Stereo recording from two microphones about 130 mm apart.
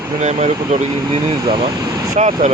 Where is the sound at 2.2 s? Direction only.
60° right (ahead or behind).